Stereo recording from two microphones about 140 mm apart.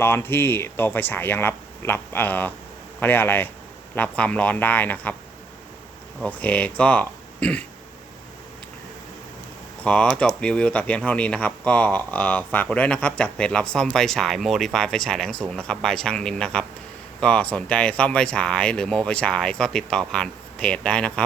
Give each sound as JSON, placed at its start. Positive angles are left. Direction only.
{"t": 0.0, "sound": "speech", "side_deg": 15}
{"t": 6.2, "sound": "speech", "side_deg": 10}
{"t": 9.8, "sound": "speech", "side_deg": 10}